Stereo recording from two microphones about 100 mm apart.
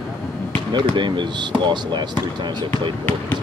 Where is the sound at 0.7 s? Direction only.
50° right (ahead or behind).